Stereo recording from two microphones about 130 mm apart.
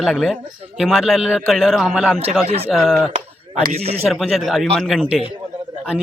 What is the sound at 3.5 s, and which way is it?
Speech, 55° right (ahead or behind).